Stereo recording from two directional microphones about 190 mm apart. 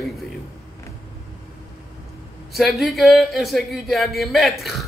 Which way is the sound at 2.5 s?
Centre (ahead or behind).